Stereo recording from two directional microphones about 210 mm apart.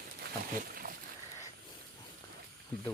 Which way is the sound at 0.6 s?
45° right (ahead or behind).